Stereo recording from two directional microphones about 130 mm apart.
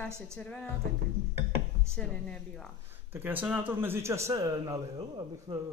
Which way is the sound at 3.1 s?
15° right (ahead or behind).